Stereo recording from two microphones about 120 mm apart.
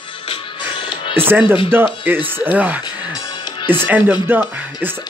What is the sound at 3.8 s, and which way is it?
Speech, 15° right (ahead or behind).